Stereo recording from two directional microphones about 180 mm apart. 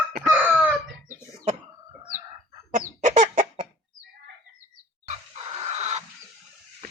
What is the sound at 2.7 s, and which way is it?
Chicken, 45° right (ahead or behind).